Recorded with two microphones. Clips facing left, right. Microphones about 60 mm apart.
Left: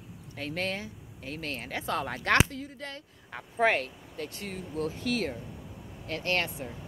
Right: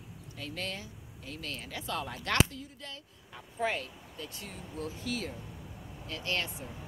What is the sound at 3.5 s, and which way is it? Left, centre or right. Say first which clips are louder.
Speech: left 7 dB; left.